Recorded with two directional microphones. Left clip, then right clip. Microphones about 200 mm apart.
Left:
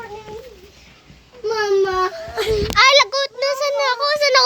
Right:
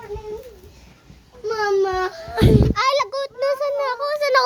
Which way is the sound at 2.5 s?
Centre (ahead or behind).